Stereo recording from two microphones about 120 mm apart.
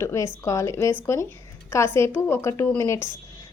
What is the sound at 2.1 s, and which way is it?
Speech, 20° left (ahead or behind).